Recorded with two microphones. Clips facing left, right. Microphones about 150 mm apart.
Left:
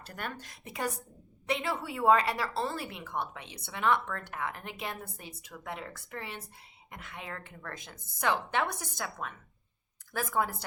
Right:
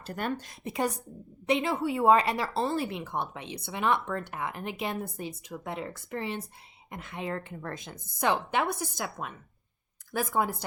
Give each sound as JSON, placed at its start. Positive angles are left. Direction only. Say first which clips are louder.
{"t": 0.0, "sound": "a woman's voice", "louder": "right 8 dB", "side_deg": -25}
{"t": 10.1, "sound": "speech", "louder": "right 3 dB", "side_deg": -15}